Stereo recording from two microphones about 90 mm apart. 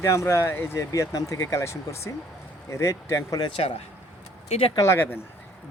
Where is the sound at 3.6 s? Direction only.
90° left.